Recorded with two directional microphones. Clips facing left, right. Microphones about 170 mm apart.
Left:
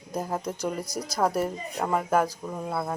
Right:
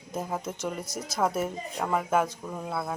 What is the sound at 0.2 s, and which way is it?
Speech, centre (ahead or behind).